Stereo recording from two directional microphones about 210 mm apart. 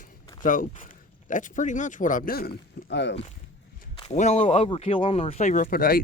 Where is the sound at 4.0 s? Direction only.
30° left (ahead or behind).